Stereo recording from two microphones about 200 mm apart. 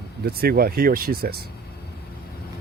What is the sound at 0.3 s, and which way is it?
Speech, 50° right (ahead or behind).